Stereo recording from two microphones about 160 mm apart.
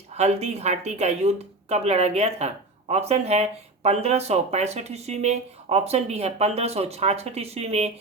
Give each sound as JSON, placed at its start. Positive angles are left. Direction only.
{"t": 0.2, "sound": "speech", "side_deg": -40}